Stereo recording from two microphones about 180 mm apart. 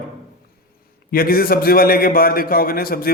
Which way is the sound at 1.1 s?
55° left (ahead or behind).